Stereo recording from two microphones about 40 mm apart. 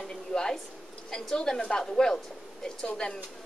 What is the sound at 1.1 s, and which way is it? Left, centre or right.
A woman's voice, centre.